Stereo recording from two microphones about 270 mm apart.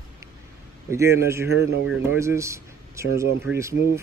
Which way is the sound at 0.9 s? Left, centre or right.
Centre.